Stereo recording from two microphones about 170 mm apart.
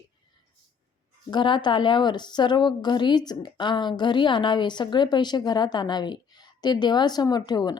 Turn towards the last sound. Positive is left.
turn(degrees=25)  # may be behind; listen again after turning